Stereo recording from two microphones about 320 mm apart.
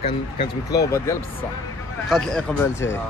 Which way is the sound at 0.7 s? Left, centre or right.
Centre.